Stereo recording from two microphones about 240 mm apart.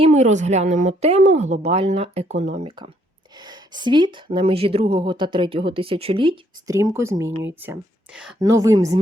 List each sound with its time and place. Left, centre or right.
0.0 s a woman's voice: right